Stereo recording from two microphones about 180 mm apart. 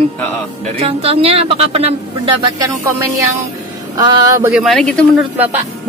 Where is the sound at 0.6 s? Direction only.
35° right (ahead or behind).